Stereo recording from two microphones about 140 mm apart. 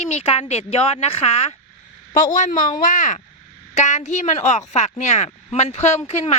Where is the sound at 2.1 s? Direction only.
70° left (ahead or behind).